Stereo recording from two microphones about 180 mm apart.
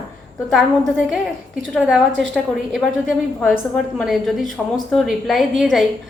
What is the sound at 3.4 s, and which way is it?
A woman's voice, 5° left (ahead or behind).